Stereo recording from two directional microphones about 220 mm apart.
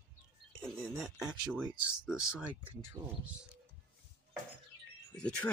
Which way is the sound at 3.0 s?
15° right (ahead or behind).